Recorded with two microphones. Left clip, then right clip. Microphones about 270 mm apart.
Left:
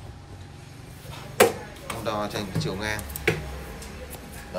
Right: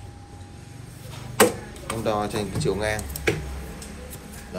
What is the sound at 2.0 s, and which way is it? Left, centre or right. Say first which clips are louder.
Speech: right 4 dB; centre.